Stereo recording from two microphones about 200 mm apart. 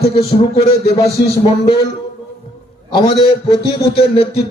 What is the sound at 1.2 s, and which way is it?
Speech, 55° left (ahead or behind).